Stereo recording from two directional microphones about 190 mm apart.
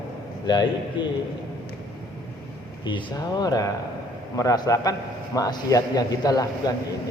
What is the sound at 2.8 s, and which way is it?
A man's voice, 25° left (ahead or behind).